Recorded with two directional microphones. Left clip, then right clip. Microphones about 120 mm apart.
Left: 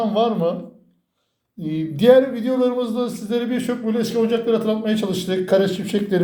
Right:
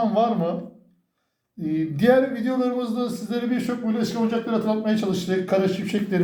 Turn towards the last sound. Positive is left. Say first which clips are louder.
# left 4 dB
turn(degrees=45)  # may be behind; listen again after turning